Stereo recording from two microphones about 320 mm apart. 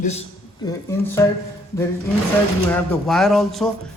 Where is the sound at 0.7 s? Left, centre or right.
Centre.